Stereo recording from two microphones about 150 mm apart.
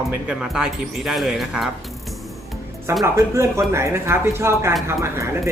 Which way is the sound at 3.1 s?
20° right (ahead or behind).